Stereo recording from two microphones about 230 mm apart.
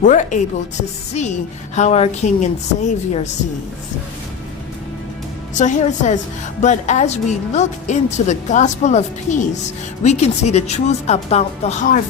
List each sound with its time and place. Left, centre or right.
0.0 s a woman's voice: left
5.5 s a woman's voice: left